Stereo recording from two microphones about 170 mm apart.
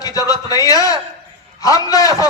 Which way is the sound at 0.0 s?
20° left (ahead or behind).